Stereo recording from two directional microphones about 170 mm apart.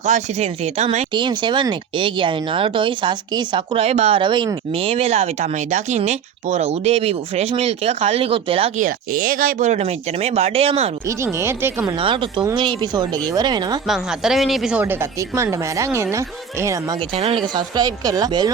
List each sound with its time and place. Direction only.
0.0 s speech: 40° right (ahead or behind)
1.1 s speech: 25° right (ahead or behind)
8.8 s speech: 55° right (ahead or behind); by 10.9 s 35° right (ahead or behind)
11.2 s a woman's voice: 15° right (ahead or behind)
11.9 s speech: 30° right (ahead or behind)
13.8 s speech: centre (ahead or behind)
15.4 s a woman's voice: 20° right (ahead or behind)
17.2 s speech: 35° right (ahead or behind)